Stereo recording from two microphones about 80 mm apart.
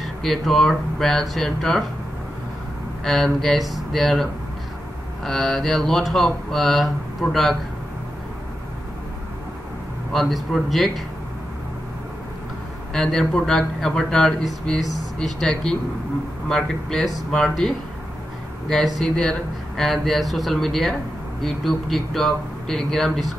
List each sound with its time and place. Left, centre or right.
0.0 s speech: centre
3.0 s speech: centre
10.1 s speech: centre
12.9 s speech: centre
18.9 s speech: centre